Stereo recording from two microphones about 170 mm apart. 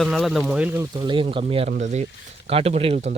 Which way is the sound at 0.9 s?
30° right (ahead or behind).